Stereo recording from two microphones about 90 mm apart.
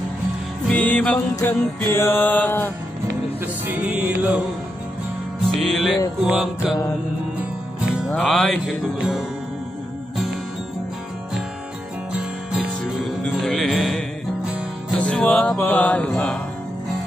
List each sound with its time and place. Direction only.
0.7 s music: 15° left (ahead or behind)
1.3 s music: 30° left (ahead or behind)
3.6 s music: 15° right (ahead or behind)
5.6 s music: centre (ahead or behind)
8.2 s music: 5° left (ahead or behind)
12.2 s music: 5° right (ahead or behind)
13.2 s music: 5° left (ahead or behind)
15.0 s music: 10° left (ahead or behind)
15.6 s music: 20° left (ahead or behind)